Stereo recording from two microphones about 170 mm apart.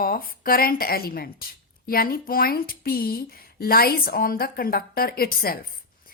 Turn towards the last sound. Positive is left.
turn(degrees=60)  # may be behind; listen again after turning